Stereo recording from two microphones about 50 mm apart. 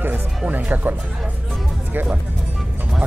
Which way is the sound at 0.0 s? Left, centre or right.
Right.